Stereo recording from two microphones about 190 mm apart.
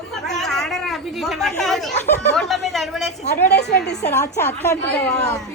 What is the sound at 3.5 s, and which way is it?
Speech, 60° left (ahead or behind).